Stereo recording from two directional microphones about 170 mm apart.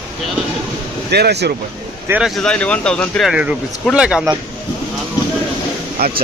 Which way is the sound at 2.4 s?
5° left (ahead or behind).